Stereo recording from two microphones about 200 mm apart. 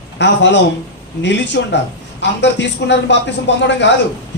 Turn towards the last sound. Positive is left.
turn(degrees=60)  # may be behind; listen again after turning